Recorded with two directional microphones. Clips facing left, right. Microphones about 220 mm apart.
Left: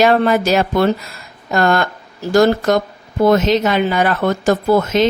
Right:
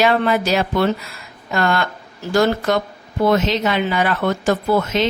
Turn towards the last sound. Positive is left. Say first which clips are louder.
# left 4 dB
turn(degrees=45)  # may be behind; listen again after turning